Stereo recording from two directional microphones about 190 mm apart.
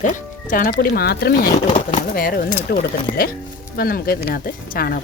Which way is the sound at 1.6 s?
35° left (ahead or behind).